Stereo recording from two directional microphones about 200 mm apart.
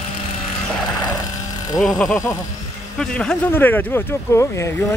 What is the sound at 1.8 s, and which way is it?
Speech, centre (ahead or behind).